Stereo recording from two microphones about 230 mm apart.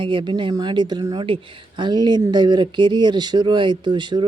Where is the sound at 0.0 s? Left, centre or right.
Right.